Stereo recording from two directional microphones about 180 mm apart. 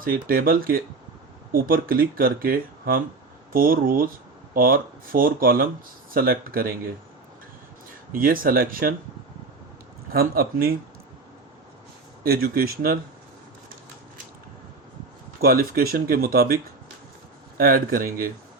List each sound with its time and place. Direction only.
0.0 s speech: 55° right (ahead or behind)
8.1 s speech: 50° right (ahead or behind)
10.1 s speech: 55° right (ahead or behind)
12.2 s speech: 55° right (ahead or behind)
15.4 s speech: 55° right (ahead or behind)
17.6 s speech: 55° right (ahead or behind)